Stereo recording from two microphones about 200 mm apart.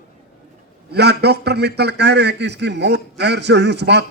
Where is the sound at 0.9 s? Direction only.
55° right (ahead or behind).